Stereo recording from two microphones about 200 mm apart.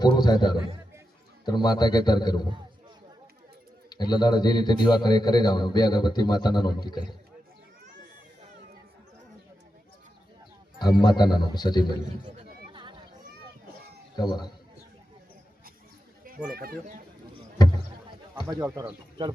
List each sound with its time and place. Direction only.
0.0 s a man's voice: 20° left (ahead or behind)
3.8 s a man's voice: 20° left (ahead or behind)
10.8 s a man's voice: 20° left (ahead or behind)
14.2 s a man's voice: 20° left (ahead or behind)
16.6 s speech: 45° right (ahead or behind)
18.3 s speech: 20° right (ahead or behind)
18.7 s speech: 10° right (ahead or behind)